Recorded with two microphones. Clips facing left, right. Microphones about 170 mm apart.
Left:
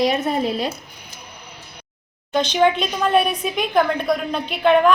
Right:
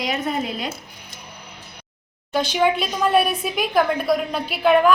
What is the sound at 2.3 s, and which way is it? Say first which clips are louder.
A woman's voice: left 2 dB; 5° right (ahead or behind).